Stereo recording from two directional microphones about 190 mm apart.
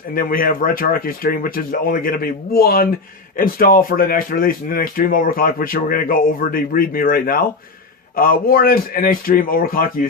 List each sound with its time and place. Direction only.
0.1 s speech: 50° left (ahead or behind)